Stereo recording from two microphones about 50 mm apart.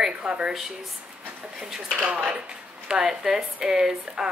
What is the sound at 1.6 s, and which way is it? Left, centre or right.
Speech, centre.